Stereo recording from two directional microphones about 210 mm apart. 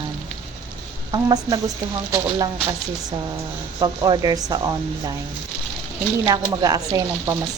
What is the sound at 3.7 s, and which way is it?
A woman's voice, 20° right (ahead or behind).